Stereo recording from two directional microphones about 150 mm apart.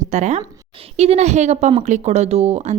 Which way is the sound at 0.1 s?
50° right (ahead or behind).